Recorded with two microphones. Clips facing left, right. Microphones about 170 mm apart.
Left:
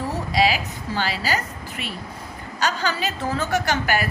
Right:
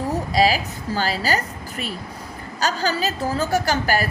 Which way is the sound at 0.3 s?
40° right (ahead or behind).